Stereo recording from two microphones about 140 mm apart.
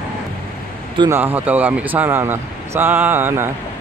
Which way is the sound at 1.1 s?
15° right (ahead or behind).